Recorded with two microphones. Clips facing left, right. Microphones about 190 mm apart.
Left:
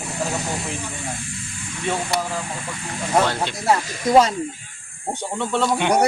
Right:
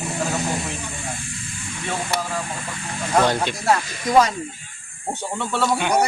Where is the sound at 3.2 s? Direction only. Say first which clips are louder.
Right 2 dB; 15° right (ahead or behind).